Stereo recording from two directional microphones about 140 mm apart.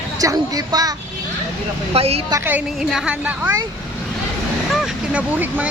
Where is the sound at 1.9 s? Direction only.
45° right (ahead or behind).